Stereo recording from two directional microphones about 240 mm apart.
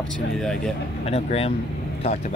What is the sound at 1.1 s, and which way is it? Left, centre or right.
Speech, left.